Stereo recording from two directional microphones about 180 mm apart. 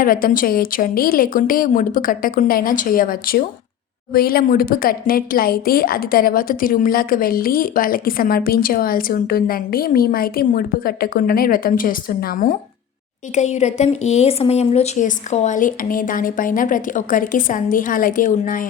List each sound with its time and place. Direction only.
0.0 s a woman's voice: 50° left (ahead or behind)
13.3 s a woman's voice: 40° left (ahead or behind)